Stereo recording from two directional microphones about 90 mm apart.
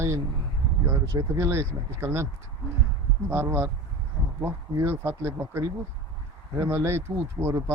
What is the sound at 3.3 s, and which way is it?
A man's voice, 30° right (ahead or behind).